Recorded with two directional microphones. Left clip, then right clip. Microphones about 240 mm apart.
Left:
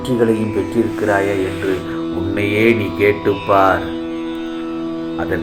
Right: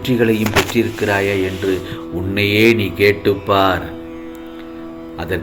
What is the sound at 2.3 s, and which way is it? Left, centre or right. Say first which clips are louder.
Speech: right 2 dB; right.